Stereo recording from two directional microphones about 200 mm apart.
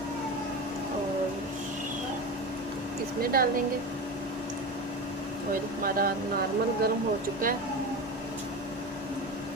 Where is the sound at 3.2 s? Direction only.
45° right (ahead or behind).